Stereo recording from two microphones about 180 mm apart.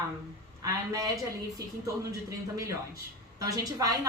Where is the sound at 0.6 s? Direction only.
20° right (ahead or behind).